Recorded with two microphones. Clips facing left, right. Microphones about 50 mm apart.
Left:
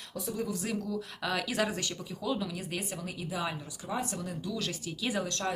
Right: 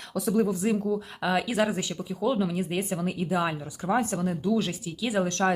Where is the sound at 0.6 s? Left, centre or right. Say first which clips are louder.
Right 8 dB; right.